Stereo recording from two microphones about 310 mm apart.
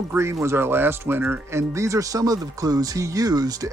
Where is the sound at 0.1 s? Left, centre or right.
Centre.